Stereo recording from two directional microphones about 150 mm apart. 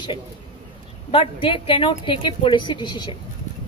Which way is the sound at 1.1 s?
35° left (ahead or behind).